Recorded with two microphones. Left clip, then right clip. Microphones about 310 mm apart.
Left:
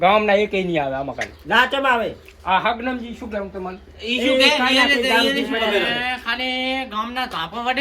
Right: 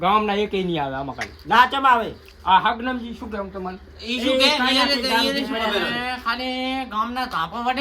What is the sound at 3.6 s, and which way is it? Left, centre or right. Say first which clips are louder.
A man's voice: left 2 dB; centre.